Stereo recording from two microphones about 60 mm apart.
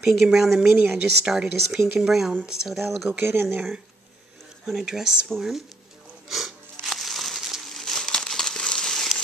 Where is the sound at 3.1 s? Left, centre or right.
Right.